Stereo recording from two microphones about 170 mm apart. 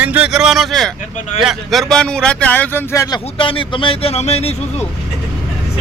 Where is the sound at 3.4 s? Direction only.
30° left (ahead or behind).